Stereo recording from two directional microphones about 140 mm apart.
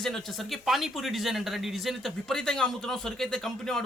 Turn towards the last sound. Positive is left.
turn(degrees=0)  # may be behind; listen again after turning